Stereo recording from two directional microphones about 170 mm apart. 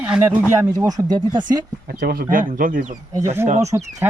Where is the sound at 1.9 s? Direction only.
65° right (ahead or behind).